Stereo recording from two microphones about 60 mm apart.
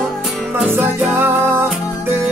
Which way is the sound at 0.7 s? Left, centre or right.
Right.